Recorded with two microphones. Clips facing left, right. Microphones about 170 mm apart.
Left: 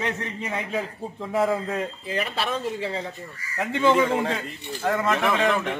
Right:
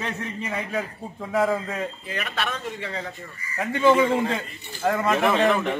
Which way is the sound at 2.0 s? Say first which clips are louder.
Left 2 dB; 30° left (ahead or behind).